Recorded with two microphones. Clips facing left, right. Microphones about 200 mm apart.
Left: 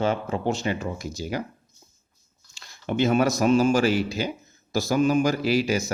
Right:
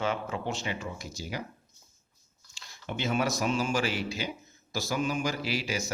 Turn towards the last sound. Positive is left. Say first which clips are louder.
# left 9 dB
turn(degrees=45)  # may be behind; listen again after turning